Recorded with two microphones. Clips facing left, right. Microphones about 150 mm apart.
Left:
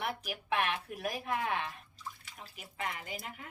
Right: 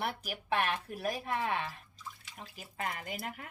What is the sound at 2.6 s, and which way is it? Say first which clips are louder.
Speech: right 1 dB; 45° right (ahead or behind).